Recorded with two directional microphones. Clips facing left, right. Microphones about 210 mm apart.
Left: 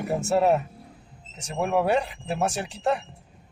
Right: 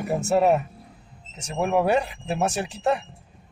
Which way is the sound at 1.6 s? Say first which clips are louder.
Right 2 dB; 10° right (ahead or behind).